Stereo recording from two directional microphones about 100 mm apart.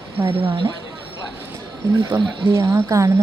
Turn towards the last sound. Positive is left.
turn(degrees=-30)  # may be behind; listen again after turning